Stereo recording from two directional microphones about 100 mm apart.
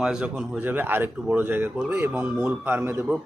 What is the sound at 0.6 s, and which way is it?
A man's voice, 20° right (ahead or behind).